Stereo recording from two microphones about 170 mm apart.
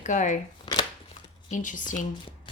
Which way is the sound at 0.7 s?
25° left (ahead or behind).